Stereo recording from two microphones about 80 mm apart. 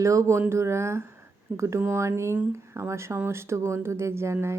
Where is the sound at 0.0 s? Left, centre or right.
Right.